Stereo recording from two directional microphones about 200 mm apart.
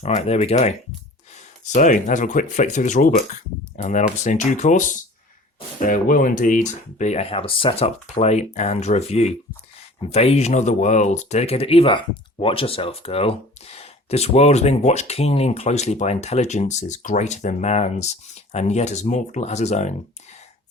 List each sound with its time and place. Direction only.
0.0 s speech: 30° left (ahead or behind)
1.7 s speech: 40° left (ahead or behind)